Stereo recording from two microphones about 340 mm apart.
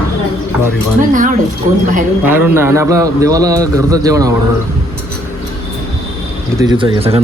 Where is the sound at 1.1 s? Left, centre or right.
Right.